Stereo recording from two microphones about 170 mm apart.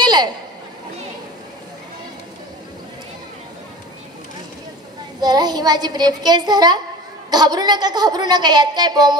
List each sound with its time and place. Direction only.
0.0 s chatter: 25° right (ahead or behind)
5.2 s a woman's voice: 25° right (ahead or behind)